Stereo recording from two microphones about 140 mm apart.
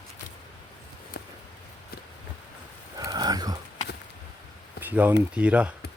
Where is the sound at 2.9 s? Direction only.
30° right (ahead or behind).